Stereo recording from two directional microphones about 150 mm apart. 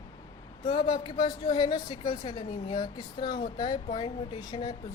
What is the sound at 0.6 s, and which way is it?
Speech, 30° left (ahead or behind).